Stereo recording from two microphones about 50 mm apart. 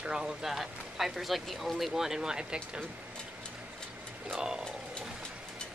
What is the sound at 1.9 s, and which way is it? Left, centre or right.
Speech, centre.